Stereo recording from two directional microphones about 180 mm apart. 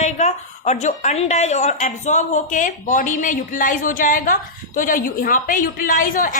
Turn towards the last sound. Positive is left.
turn(degrees=45)  # may be behind; listen again after turning